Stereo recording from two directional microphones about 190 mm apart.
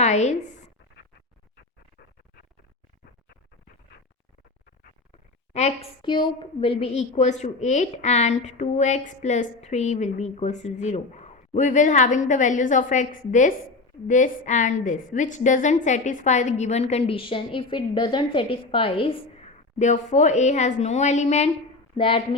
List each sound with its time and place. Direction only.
0.0 s a woman's voice: 35° left (ahead or behind)
5.5 s a woman's voice: 35° left (ahead or behind)